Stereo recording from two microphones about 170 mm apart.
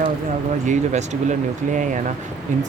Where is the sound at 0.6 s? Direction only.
45° right (ahead or behind).